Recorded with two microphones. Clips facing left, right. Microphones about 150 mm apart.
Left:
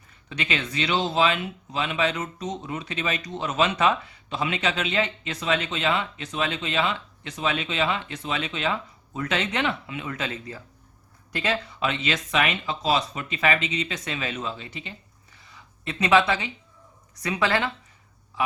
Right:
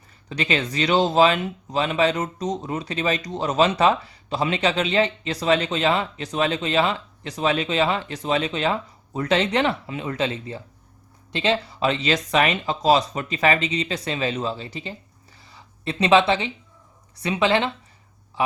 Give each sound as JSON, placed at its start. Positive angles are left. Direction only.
{"t": 0.3, "sound": "a man's voice", "side_deg": -35}